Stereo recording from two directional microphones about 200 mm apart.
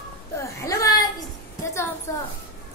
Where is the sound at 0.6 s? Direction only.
15° left (ahead or behind).